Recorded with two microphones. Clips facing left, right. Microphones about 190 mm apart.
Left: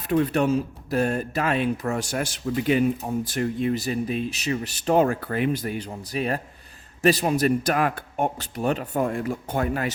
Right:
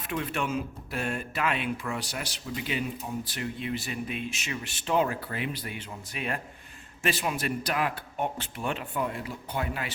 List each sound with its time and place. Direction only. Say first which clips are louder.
0.1 s speech: left 10 dB; 40° left (ahead or behind)